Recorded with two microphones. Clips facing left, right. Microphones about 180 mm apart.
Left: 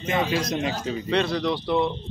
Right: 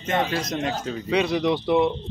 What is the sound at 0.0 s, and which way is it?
Speech, centre (ahead or behind).